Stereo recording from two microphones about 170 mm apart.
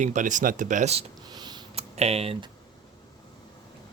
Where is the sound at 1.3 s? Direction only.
25° right (ahead or behind).